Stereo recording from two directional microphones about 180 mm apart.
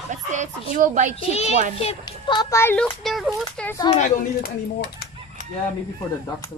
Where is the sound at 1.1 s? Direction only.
35° left (ahead or behind); by 3.4 s centre (ahead or behind).